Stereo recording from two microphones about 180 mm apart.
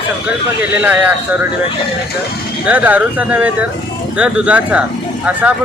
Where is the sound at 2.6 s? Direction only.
10° right (ahead or behind).